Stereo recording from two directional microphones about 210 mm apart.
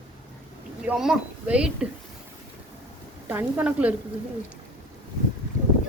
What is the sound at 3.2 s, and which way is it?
Speech, 10° right (ahead or behind).